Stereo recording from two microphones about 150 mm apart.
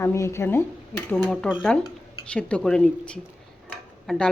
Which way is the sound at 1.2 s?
5° left (ahead or behind).